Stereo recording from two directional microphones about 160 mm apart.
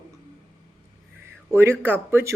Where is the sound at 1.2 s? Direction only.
15° right (ahead or behind).